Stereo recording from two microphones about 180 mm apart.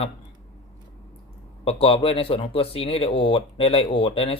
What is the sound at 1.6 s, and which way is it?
Speech, 30° left (ahead or behind).